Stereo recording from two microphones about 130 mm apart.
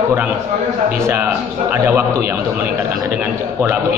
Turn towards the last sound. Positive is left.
turn(degrees=-15)  # may be behind; listen again after turning